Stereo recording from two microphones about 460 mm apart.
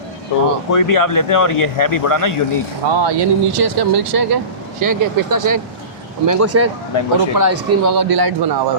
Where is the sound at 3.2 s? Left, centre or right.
Right.